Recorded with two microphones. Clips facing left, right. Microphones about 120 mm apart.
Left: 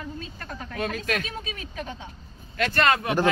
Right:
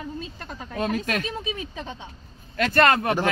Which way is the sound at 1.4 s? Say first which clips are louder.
Right 5 dB; 20° right (ahead or behind).